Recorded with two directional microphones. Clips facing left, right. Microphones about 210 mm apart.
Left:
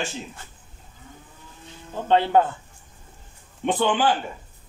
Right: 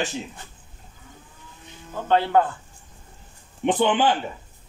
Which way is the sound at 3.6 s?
20° right (ahead or behind).